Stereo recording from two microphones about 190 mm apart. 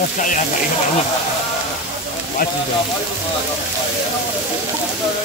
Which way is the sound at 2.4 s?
50° left (ahead or behind).